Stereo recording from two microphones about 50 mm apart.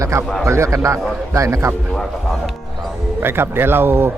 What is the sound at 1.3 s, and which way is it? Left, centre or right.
Speech, right.